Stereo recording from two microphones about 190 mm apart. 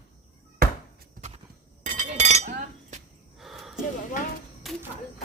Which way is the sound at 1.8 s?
40° right (ahead or behind).